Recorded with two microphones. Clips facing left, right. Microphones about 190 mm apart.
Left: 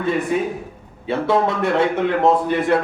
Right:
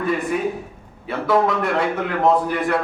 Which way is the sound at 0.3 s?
25° left (ahead or behind).